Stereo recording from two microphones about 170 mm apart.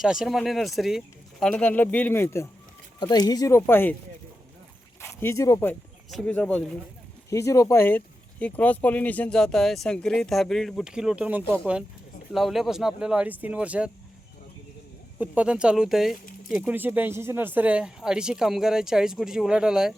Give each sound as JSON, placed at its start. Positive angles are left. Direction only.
{"t": 0.0, "sound": "speech", "side_deg": 0}
{"t": 5.2, "sound": "speech", "side_deg": 15}
{"t": 6.1, "sound": "speech", "side_deg": 5}
{"t": 7.3, "sound": "speech", "side_deg": 20}
{"t": 15.2, "sound": "speech", "side_deg": -5}